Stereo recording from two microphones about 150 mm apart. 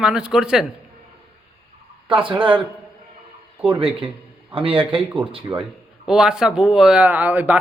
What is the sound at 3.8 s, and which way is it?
A man's voice, 35° right (ahead or behind).